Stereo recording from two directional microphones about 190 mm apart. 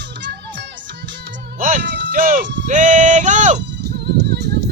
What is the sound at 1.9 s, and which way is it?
Music, 70° right (ahead or behind).